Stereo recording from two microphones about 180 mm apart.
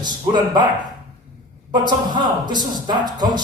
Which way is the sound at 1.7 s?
25° right (ahead or behind).